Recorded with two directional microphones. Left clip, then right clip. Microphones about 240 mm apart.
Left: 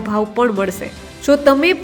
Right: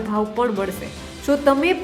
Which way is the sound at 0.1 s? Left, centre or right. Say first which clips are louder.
Left 5 dB; centre.